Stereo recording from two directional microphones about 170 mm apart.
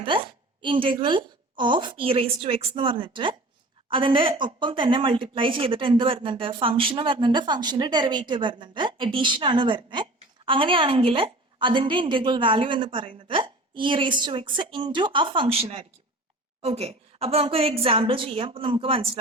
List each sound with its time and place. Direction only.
0.0 s a woman's voice: 30° right (ahead or behind)